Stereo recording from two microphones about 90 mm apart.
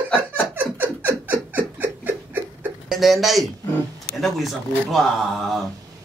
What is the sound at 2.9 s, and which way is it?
A man's voice, centre (ahead or behind).